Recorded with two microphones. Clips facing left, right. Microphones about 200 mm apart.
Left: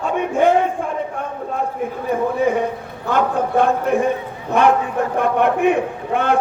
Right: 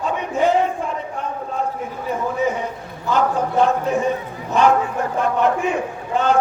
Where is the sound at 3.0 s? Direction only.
55° left (ahead or behind).